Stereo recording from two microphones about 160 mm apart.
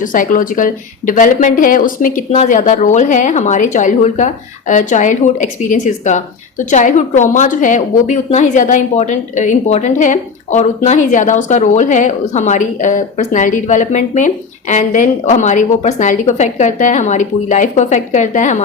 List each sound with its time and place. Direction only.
0.0 s a woman's voice: 55° left (ahead or behind)